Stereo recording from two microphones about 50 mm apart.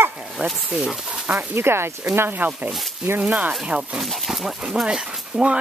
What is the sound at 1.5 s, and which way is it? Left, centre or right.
Speech, right.